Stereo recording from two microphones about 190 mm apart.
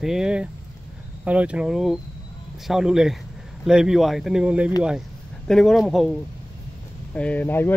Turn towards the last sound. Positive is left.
turn(degrees=10)  # may be behind; listen again after turning